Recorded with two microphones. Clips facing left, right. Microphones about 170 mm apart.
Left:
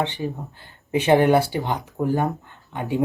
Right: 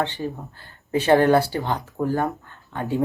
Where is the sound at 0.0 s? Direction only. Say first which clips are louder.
Even; 20° left (ahead or behind).